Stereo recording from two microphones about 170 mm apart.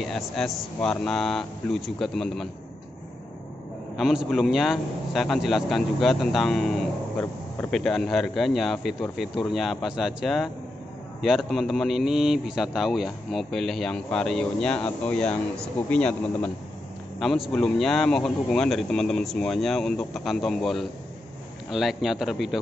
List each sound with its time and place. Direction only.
0.0 s speech: centre (ahead or behind)
3.9 s speech: centre (ahead or behind)